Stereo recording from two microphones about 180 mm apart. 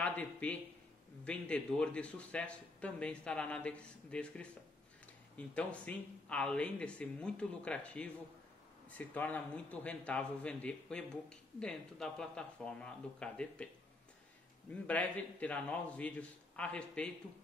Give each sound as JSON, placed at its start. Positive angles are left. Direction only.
{"t": 0.0, "sound": "a man's voice", "side_deg": 5}
{"t": 5.5, "sound": "a man's voice", "side_deg": 5}
{"t": 14.7, "sound": "a man's voice", "side_deg": 10}